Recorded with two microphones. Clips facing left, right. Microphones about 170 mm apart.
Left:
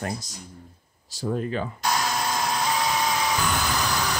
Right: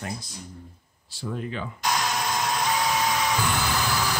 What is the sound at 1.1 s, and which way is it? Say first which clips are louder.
Speech: left 5 dB; 40° left (ahead or behind).